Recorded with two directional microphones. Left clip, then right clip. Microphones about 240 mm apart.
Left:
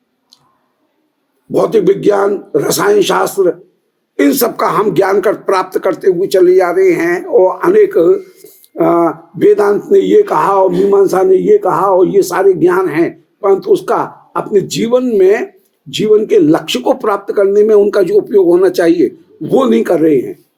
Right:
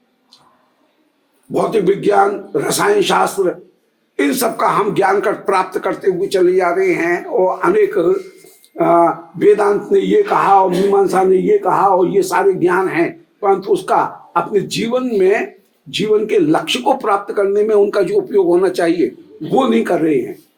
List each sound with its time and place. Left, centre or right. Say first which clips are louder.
1.5 s speech: left 5 dB; left